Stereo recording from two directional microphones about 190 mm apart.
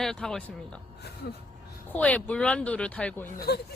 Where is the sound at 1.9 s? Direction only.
5° left (ahead or behind).